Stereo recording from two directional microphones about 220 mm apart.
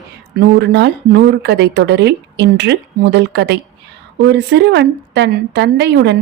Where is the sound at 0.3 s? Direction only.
50° right (ahead or behind).